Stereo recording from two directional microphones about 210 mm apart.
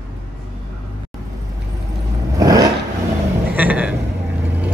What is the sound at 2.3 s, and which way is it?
Vehicle, 15° right (ahead or behind).